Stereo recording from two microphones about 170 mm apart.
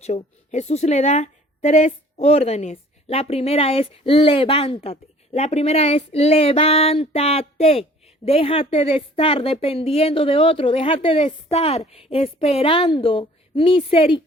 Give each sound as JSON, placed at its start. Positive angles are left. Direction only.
{"t": 0.0, "sound": "a woman's voice", "side_deg": 40}